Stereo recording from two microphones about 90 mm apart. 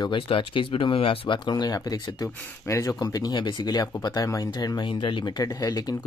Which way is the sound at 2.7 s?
35° left (ahead or behind).